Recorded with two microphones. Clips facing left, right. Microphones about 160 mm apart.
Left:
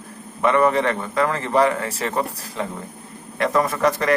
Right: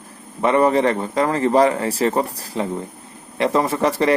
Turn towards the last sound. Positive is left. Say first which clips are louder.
# right 2 dB
turn(degrees=-30)  # may be behind; listen again after turning